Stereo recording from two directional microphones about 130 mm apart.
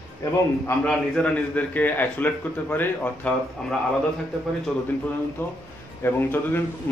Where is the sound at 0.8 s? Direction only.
10° left (ahead or behind).